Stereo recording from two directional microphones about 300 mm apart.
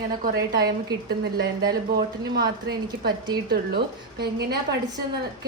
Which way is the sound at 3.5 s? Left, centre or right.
Right.